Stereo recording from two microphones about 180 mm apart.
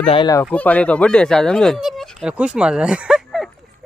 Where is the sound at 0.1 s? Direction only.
25° left (ahead or behind).